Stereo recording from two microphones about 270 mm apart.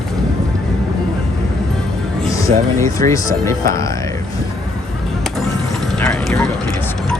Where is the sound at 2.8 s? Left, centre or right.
Centre.